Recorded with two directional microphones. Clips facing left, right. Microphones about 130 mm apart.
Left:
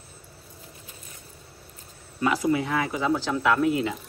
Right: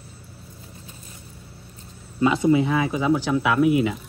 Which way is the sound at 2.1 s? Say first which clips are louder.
Right 5 dB; 25° right (ahead or behind).